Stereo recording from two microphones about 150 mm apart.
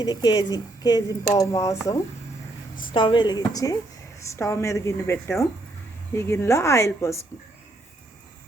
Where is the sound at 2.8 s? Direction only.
35° left (ahead or behind).